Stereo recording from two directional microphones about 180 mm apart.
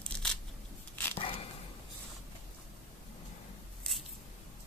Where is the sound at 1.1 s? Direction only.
35° left (ahead or behind).